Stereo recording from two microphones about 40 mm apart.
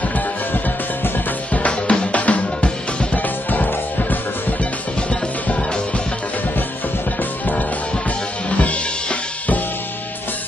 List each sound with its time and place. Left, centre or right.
1.5 s music: left
3.2 s music: left
8.5 s music: left